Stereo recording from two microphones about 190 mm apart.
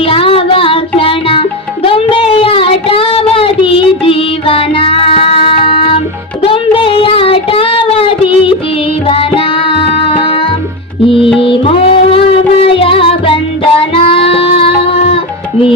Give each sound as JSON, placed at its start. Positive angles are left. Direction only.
{"t": 0.0, "sound": "music", "side_deg": 30}
{"t": 6.4, "sound": "child singing", "side_deg": 30}
{"t": 9.0, "sound": "music", "side_deg": 30}